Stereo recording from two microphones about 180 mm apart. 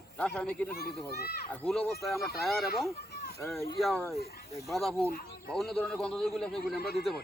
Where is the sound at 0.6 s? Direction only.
55° left (ahead or behind).